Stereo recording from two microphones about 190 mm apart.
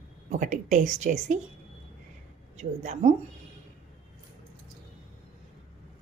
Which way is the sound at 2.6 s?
40° right (ahead or behind).